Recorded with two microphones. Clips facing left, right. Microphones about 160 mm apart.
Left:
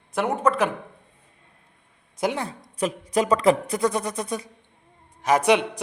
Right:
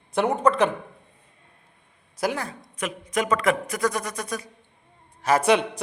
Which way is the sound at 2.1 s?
25° left (ahead or behind).